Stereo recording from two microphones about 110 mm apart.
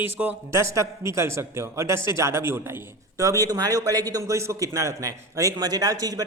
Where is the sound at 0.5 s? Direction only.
25° right (ahead or behind).